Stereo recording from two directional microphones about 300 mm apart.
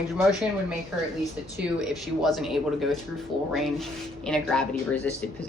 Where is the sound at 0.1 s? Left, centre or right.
Centre.